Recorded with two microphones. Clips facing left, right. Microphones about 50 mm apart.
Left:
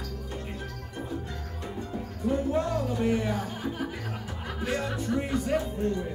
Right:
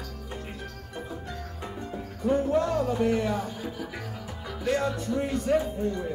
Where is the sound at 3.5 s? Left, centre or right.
Left.